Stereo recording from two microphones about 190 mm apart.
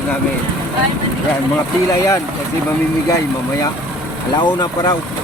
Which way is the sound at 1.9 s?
15° left (ahead or behind).